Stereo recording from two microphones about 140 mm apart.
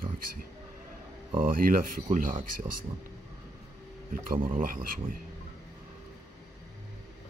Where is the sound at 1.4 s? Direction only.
90° right.